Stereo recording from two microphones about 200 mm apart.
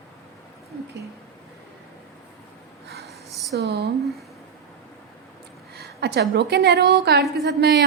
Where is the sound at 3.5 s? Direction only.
55° right (ahead or behind).